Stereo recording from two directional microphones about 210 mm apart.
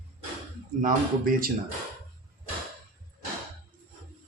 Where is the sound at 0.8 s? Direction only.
40° right (ahead or behind).